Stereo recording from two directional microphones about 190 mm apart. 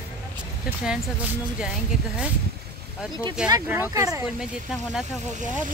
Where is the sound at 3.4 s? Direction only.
5° right (ahead or behind).